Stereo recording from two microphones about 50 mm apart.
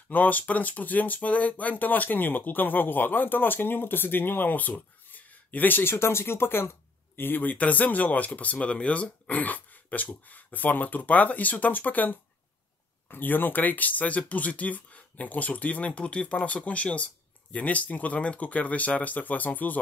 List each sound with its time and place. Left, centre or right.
0.1 s speech: left
7.5 s speech: left